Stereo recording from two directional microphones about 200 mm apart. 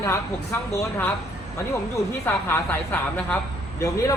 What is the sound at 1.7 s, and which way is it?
A woman's voice, 15° left (ahead or behind).